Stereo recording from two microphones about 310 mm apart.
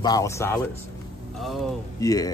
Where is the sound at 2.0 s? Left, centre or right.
Centre.